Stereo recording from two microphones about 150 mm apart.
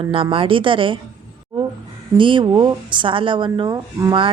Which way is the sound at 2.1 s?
35° right (ahead or behind).